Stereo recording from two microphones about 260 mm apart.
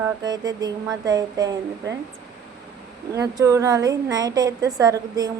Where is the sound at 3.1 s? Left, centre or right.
Centre.